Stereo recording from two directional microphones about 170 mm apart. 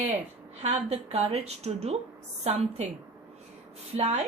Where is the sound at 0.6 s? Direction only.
40° right (ahead or behind).